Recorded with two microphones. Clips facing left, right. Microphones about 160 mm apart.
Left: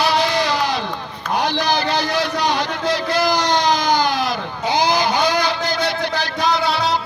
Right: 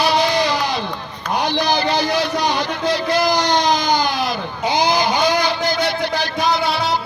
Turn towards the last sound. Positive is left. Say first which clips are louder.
# even
turn(degrees=-10)  # may be behind; listen again after turning